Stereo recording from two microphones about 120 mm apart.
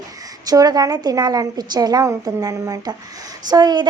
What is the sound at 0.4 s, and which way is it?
A woman's voice, 30° right (ahead or behind).